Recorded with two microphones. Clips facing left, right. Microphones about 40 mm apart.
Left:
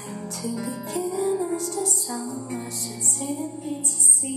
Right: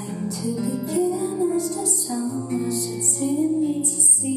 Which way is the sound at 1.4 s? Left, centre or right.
Left.